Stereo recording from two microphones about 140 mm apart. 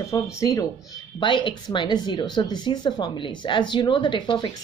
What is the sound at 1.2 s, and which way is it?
Speech, 35° left (ahead or behind).